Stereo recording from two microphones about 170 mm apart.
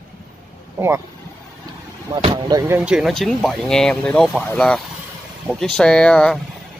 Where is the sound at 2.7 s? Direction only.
5° right (ahead or behind).